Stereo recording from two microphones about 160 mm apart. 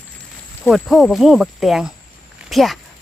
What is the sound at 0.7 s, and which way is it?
Speech, centre (ahead or behind).